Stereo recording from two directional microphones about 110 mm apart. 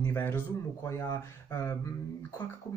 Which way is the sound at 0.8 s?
25° left (ahead or behind).